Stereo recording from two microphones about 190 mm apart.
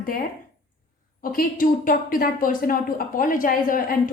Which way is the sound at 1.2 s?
50° left (ahead or behind).